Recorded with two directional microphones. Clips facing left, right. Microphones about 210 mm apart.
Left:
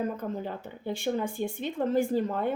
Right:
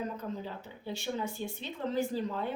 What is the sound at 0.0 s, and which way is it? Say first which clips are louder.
Speech: left 5 dB; 50° left (ahead or behind).